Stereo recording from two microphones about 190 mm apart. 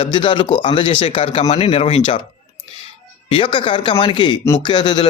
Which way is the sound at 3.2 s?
25° left (ahead or behind).